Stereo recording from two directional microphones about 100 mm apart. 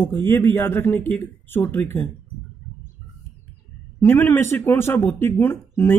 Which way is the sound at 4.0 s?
25° left (ahead or behind).